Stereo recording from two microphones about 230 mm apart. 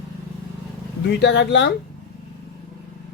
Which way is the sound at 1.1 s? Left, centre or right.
Left.